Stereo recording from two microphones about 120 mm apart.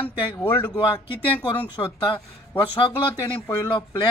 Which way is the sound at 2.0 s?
40° left (ahead or behind).